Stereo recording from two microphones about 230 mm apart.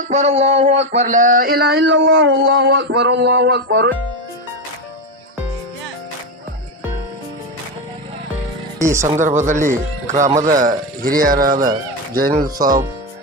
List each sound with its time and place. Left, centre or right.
0.1 s speech: right
8.8 s speech: centre
9.1 s speech: right